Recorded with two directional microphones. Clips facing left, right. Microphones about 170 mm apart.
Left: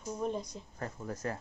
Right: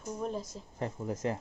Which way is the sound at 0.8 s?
20° right (ahead or behind).